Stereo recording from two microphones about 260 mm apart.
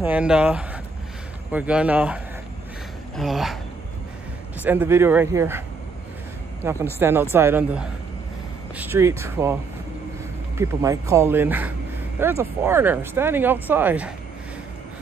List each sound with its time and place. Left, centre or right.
0.0 s speech: centre
3.2 s speech: centre
4.6 s speech: centre
6.6 s speech: centre
10.6 s speech: centre